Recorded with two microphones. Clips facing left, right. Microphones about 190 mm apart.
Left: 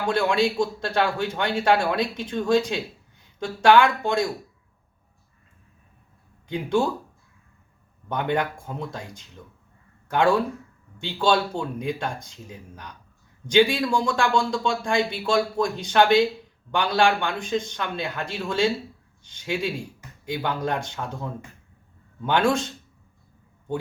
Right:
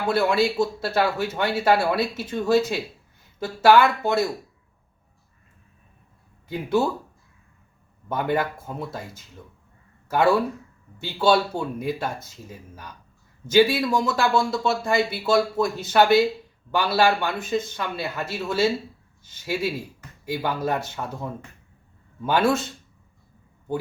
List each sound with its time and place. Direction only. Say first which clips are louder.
0.0 s a man's voice: right 1 dB; 5° right (ahead or behind)
6.5 s speech: even; 5° right (ahead or behind)
8.1 s a man's voice: right 1 dB; 5° right (ahead or behind)